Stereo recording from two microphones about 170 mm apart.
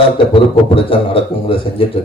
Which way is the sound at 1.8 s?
30° left (ahead or behind).